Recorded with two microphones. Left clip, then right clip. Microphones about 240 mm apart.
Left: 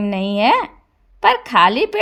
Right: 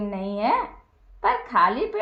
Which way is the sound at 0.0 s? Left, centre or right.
Left.